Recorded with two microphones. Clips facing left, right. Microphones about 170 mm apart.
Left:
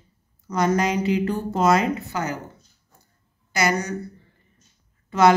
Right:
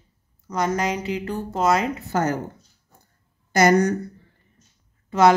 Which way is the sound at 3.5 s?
50° right (ahead or behind).